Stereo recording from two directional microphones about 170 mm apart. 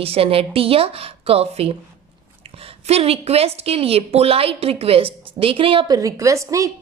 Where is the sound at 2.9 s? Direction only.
35° right (ahead or behind).